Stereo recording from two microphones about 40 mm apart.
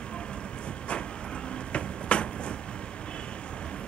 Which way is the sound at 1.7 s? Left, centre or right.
Left.